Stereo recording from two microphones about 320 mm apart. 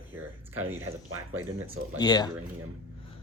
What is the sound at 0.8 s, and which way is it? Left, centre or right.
Speech, right.